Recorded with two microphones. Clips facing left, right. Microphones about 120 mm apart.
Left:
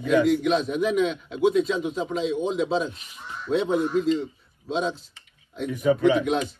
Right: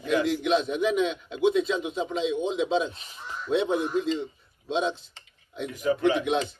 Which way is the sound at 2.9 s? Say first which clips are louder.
Even; 30° right (ahead or behind).